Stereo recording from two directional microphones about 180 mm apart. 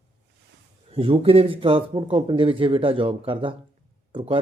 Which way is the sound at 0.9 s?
30° right (ahead or behind).